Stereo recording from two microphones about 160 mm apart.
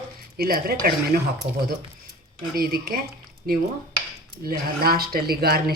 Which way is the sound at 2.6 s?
70° right (ahead or behind).